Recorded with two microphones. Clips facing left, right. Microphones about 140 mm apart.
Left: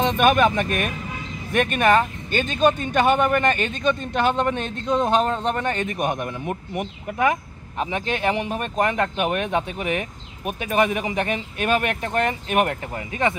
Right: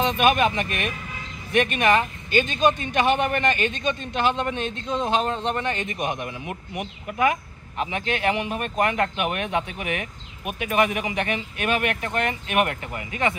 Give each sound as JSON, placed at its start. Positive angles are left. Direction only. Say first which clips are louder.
{"t": 0.0, "sound": "speech", "louder": "left 2 dB", "side_deg": 45}